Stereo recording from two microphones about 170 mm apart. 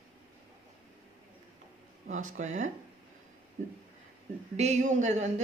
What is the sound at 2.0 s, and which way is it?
Speech, 50° right (ahead or behind).